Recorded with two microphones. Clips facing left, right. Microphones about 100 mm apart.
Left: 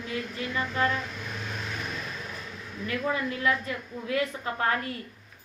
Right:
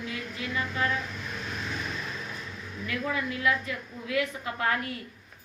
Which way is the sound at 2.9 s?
35° left (ahead or behind).